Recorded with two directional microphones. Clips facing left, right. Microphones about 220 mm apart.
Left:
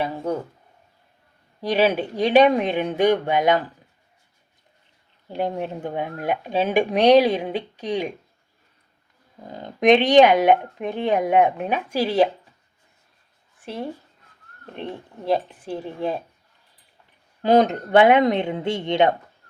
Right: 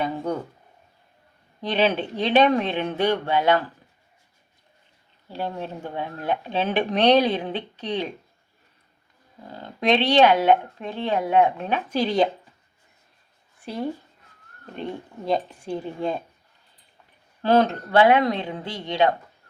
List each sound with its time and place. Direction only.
1.6 s speech: 10° left (ahead or behind)
5.3 s speech: 15° left (ahead or behind)
9.5 s speech: 15° left (ahead or behind)
14.8 s speech: 5° left (ahead or behind)
17.4 s speech: 15° left (ahead or behind)